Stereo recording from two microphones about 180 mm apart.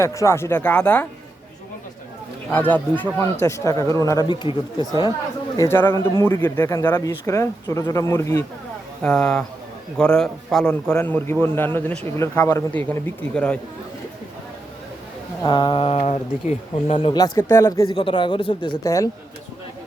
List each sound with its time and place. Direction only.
0.0 s speech: 15° left (ahead or behind)
2.5 s speech: 10° left (ahead or behind)
5.5 s speech: 15° left (ahead or behind)
9.0 s a man's voice: 5° left (ahead or behind)
15.4 s speech: 25° left (ahead or behind)
17.9 s speech: 25° left (ahead or behind)